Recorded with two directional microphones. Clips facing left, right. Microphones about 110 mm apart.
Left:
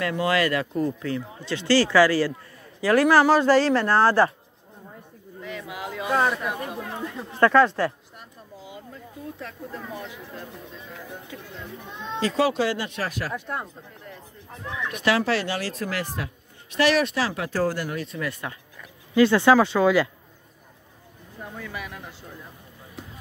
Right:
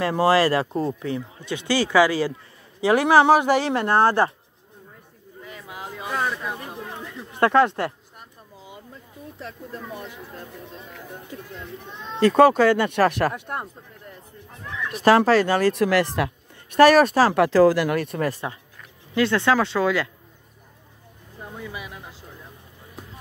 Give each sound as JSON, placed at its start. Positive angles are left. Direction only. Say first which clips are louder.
{"t": 0.0, "sound": "speech", "louder": "right 5 dB", "side_deg": -35}
{"t": 5.4, "sound": "a sound", "louder": "left 3 dB", "side_deg": -30}
{"t": 6.2, "sound": "speech", "louder": "left 3 dB", "side_deg": 10}
{"t": 7.3, "sound": "speech", "louder": "even", "side_deg": -25}
{"t": 11.3, "sound": "speech", "louder": "right 2 dB", "side_deg": -20}
{"t": 12.2, "sound": "speech", "louder": "right 8 dB", "side_deg": -55}
{"t": 14.9, "sound": "speech", "louder": "right 7 dB", "side_deg": -35}
{"t": 15.1, "sound": "speech", "louder": "right 7 dB", "side_deg": -45}
{"t": 15.7, "sound": "speech", "louder": "right 9 dB", "side_deg": -70}
{"t": 16.7, "sound": "speech", "louder": "right 7 dB", "side_deg": -45}
{"t": 17.3, "sound": "speech", "louder": "right 10 dB", "side_deg": -80}
{"t": 18.4, "sound": "speech", "louder": "right 3 dB", "side_deg": -20}
{"t": 19.1, "sound": "speech", "louder": "left 3 dB", "side_deg": 5}
{"t": 21.4, "sound": "speech", "louder": "even", "side_deg": -15}